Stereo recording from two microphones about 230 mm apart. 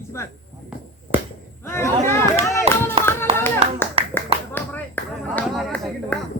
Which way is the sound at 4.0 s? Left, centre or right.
Right.